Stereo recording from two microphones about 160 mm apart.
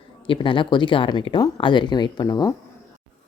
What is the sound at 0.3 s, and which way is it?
Speech, 30° left (ahead or behind).